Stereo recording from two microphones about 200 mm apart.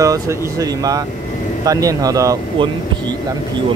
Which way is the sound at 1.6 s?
15° right (ahead or behind).